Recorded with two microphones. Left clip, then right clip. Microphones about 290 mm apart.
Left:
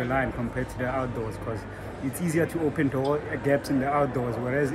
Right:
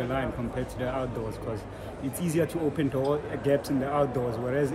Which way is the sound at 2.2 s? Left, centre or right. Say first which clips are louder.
Left 1 dB; centre.